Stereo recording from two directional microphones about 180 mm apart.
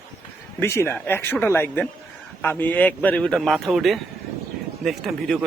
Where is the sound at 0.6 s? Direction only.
15° left (ahead or behind).